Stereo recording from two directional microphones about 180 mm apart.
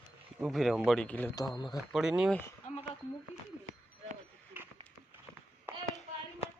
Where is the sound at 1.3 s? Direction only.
20° left (ahead or behind).